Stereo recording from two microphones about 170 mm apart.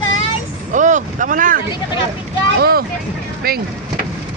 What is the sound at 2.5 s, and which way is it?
Speech, 65° right (ahead or behind).